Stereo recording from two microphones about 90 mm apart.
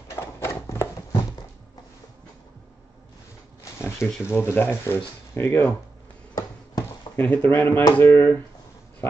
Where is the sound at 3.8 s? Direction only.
30° left (ahead or behind).